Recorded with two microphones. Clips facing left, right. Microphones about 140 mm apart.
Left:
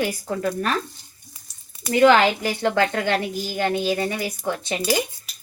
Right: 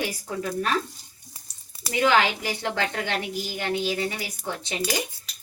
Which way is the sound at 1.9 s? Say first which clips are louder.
Left 6 dB; 45° left (ahead or behind).